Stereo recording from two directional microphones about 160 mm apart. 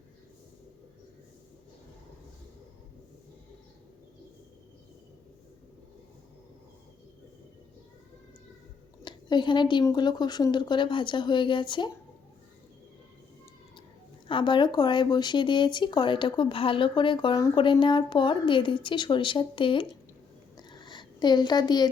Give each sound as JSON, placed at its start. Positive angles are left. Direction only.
{"t": 9.0, "sound": "speech", "side_deg": 30}
{"t": 14.3, "sound": "speech", "side_deg": 30}
{"t": 20.6, "sound": "a sound", "side_deg": 25}